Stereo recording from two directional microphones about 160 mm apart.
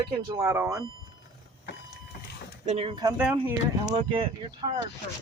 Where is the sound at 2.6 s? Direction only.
40° right (ahead or behind).